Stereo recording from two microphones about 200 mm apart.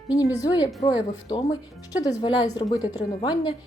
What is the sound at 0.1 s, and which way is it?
A woman's voice, 15° left (ahead or behind).